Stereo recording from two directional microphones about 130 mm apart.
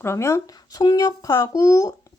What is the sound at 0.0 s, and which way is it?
Speech, 20° left (ahead or behind).